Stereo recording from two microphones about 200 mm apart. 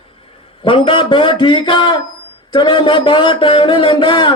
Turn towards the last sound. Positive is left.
turn(degrees=25)  # may be behind; listen again after turning